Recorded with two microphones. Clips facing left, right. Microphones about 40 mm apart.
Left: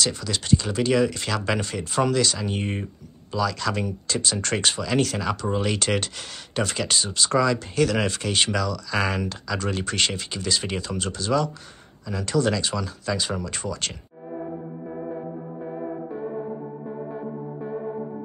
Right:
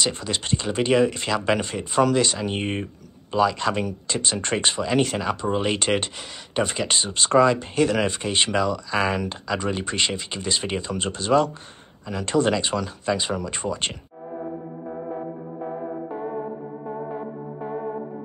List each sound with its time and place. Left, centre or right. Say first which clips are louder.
0.0 s speech: right 1 dB; right
3.3 s speech: right 4 dB; right
7.0 s speech: right 5 dB; right; by 10.2 s centre
10.3 s speech: right 1 dB; right
15.6 s music: right 2 dB; right